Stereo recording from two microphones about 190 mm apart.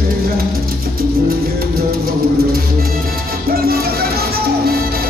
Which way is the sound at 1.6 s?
55° right (ahead or behind).